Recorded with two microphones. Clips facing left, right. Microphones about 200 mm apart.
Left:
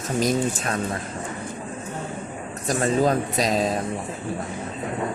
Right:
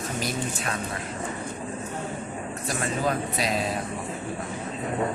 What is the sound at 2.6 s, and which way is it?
Speech, 40° left (ahead or behind).